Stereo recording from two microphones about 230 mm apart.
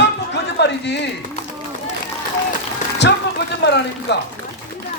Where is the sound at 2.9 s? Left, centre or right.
Left.